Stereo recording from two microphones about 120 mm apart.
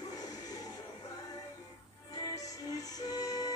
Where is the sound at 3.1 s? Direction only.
30° left (ahead or behind).